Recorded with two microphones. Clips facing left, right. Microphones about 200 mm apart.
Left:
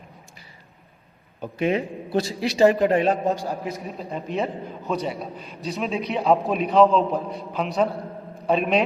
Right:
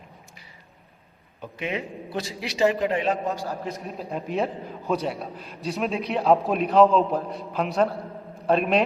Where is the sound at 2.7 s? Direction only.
45° left (ahead or behind).